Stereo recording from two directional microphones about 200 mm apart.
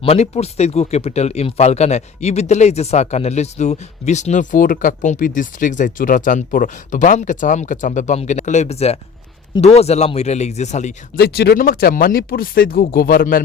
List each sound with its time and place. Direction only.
0.0 s speech: 30° left (ahead or behind)
11.2 s speech: 50° left (ahead or behind)